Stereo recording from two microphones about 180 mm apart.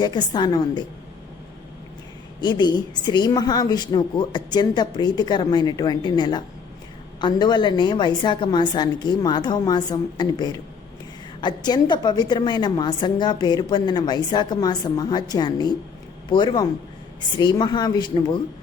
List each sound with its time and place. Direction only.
0.0 s a woman's voice: 25° left (ahead or behind)
2.4 s a woman's voice: 25° left (ahead or behind)